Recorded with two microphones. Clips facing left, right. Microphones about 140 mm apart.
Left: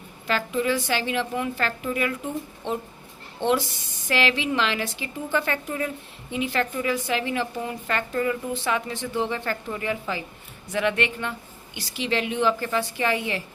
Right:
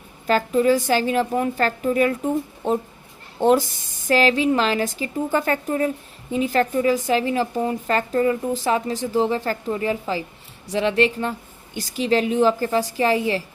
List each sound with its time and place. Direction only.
0.3 s a woman's voice: 40° right (ahead or behind)
3.4 s a woman's voice: 45° right (ahead or behind)